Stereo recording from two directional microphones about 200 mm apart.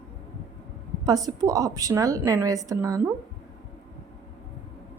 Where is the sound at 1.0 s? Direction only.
20° right (ahead or behind).